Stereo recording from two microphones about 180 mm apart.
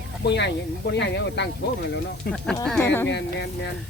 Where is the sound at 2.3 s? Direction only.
60° left (ahead or behind).